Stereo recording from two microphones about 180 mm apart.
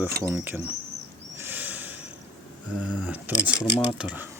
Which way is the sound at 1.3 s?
10° right (ahead or behind).